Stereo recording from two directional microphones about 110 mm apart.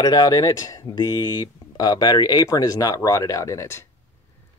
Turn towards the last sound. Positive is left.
turn(degrees=25)  # may be behind; listen again after turning